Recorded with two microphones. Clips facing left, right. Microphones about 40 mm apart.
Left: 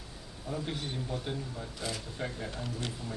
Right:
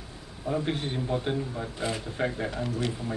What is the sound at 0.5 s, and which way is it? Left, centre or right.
A man's voice, right.